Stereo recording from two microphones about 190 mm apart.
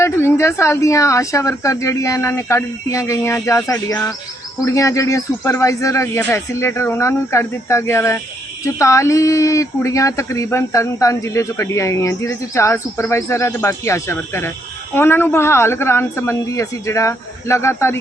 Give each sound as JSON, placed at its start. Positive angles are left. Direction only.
{"t": 0.0, "sound": "speech", "side_deg": 15}